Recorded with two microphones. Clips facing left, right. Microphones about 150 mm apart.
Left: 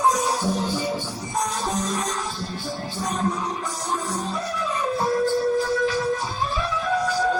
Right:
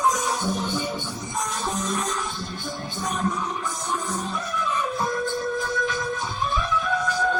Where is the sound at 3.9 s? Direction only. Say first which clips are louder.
Left 2 dB; 35° left (ahead or behind).